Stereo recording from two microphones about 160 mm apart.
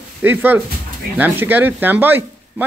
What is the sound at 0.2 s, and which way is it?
Speech, 10° right (ahead or behind).